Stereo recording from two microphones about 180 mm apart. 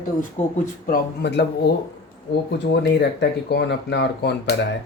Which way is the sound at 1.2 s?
70° left (ahead or behind).